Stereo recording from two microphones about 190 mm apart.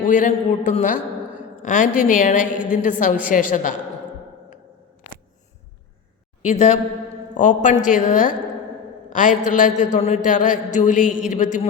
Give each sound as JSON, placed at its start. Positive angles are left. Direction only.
{"t": 0.1, "sound": "a man's voice", "side_deg": 40}
{"t": 2.4, "sound": "a woman's voice", "side_deg": -10}
{"t": 2.8, "sound": "a man's voice", "side_deg": 40}
{"t": 6.4, "sound": "a woman's voice", "side_deg": 35}
{"t": 9.0, "sound": "a sound", "side_deg": 45}
{"t": 9.4, "sound": "a man's voice", "side_deg": 40}
{"t": 11.0, "sound": "a woman's voice", "side_deg": -5}
{"t": 11.3, "sound": "a man's voice", "side_deg": 40}